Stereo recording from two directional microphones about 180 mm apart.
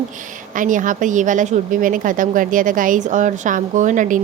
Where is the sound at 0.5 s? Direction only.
45° right (ahead or behind).